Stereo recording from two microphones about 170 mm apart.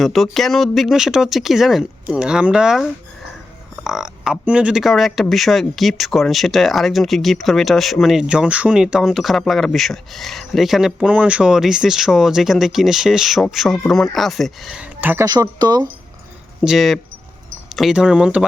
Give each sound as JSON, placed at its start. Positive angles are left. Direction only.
{"t": 0.0, "sound": "speech", "side_deg": 0}
{"t": 15.3, "sound": "speech", "side_deg": -25}
{"t": 16.6, "sound": "speech", "side_deg": 0}